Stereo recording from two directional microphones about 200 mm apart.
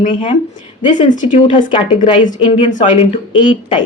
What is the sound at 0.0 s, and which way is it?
Speech, 40° left (ahead or behind).